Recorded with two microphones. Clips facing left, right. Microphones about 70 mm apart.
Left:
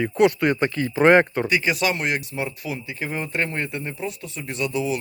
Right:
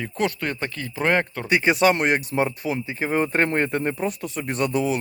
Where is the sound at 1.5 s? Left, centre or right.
Right.